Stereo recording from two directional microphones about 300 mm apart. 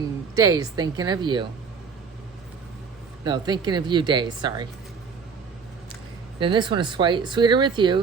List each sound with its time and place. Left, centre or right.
0.3 s speech: centre
3.2 s speech: centre
6.4 s speech: centre